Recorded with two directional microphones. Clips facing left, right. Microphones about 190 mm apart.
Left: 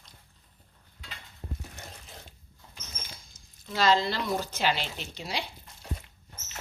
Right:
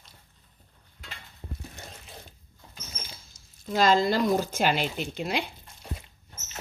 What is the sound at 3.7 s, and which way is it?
Speech, 45° right (ahead or behind).